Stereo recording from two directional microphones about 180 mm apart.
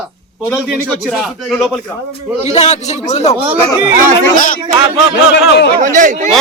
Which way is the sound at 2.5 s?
35° left (ahead or behind).